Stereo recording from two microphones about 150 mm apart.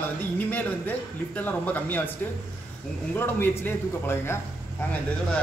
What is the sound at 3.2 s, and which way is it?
A man's voice, 15° left (ahead or behind).